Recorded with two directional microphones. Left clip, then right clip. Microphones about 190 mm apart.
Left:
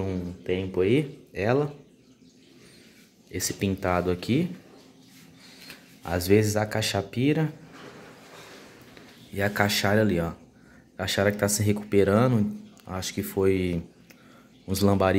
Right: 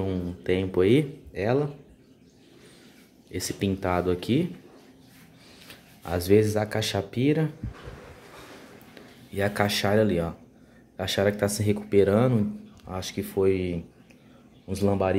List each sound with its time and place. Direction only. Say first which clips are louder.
0.4 s speech: right 2 dB; 20° right (ahead or behind)
1.3 s speech: left 1 dB; centre (ahead or behind)
3.3 s speech: even; centre (ahead or behind)
5.7 s speech: left 1 dB; centre (ahead or behind)
9.3 s speech: left 1 dB; centre (ahead or behind)